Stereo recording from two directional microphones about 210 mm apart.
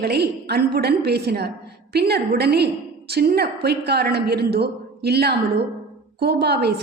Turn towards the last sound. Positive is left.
turn(degrees=-50)  # may be behind; listen again after turning